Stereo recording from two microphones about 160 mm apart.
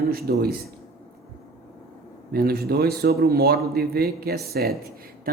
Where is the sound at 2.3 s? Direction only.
75° right (ahead or behind).